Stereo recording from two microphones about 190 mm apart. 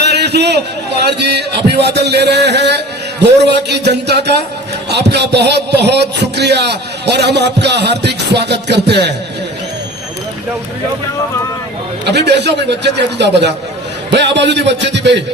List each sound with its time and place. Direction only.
0.0 s a man's voice: 60° right (ahead or behind)
12.0 s a man's voice: 60° right (ahead or behind)